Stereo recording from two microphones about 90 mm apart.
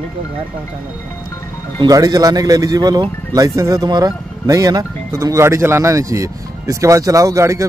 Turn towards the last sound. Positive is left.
turn(degrees=-35)  # may be behind; listen again after turning